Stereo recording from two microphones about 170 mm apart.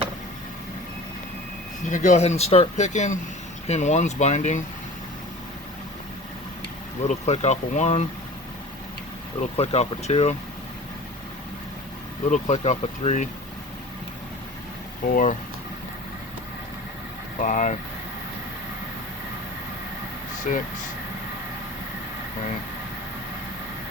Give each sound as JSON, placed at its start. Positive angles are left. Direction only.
{"t": 1.9, "sound": "speech", "side_deg": 50}
{"t": 7.0, "sound": "speech", "side_deg": 40}
{"t": 9.6, "sound": "speech", "side_deg": 40}
{"t": 12.3, "sound": "speech", "side_deg": 45}
{"t": 15.0, "sound": "speech", "side_deg": 50}
{"t": 17.4, "sound": "speech", "side_deg": 45}
{"t": 20.5, "sound": "speech", "side_deg": 50}